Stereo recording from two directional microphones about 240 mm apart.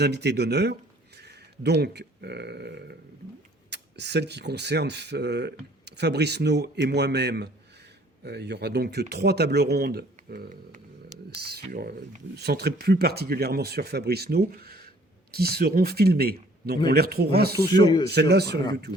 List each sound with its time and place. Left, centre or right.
0.0 s speech: right
17.7 s speech: centre
18.1 s speech: right